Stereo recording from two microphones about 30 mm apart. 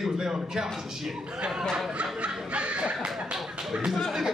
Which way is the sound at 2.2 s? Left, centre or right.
Right.